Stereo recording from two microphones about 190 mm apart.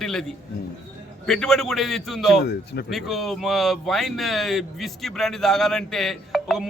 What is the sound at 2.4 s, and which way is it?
Speech, 60° left (ahead or behind).